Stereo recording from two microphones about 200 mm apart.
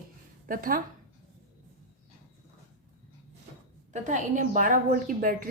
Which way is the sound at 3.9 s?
40° right (ahead or behind).